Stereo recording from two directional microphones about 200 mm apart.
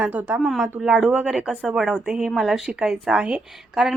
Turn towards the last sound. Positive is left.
turn(degrees=-5)  # may be behind; listen again after turning